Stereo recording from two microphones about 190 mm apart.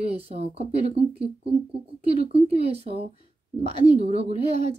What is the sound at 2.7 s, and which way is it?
Speech, 30° right (ahead or behind).